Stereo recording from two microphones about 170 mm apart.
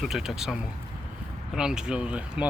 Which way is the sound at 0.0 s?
Centre (ahead or behind).